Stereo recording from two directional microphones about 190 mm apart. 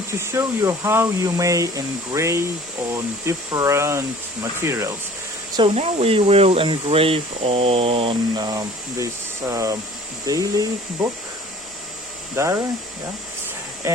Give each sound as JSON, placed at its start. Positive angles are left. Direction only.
{"t": 0.2, "sound": "speech", "side_deg": -15}
{"t": 5.5, "sound": "speech", "side_deg": -30}
{"t": 12.4, "sound": "speech", "side_deg": -15}
{"t": 13.8, "sound": "speech", "side_deg": -15}